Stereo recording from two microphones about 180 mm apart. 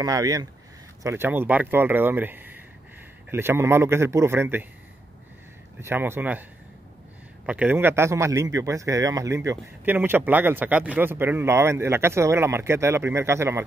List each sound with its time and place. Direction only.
0.0 s speech: 20° right (ahead or behind)
5.8 s speech: 15° right (ahead or behind)
7.4 s speech: 10° right (ahead or behind)